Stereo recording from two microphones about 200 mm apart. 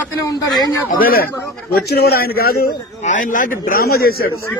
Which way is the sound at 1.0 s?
50° left (ahead or behind).